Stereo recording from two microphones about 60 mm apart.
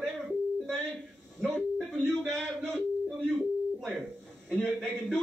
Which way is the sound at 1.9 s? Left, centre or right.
Centre.